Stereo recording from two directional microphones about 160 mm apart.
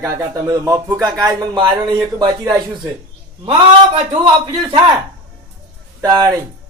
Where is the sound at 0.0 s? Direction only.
20° right (ahead or behind).